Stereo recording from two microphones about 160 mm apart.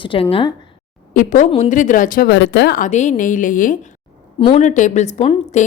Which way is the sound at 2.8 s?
45° left (ahead or behind).